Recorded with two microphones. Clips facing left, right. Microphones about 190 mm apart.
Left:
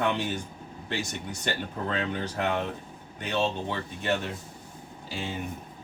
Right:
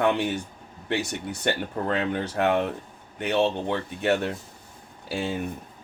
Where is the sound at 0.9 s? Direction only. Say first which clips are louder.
Right 5 dB; 60° right (ahead or behind).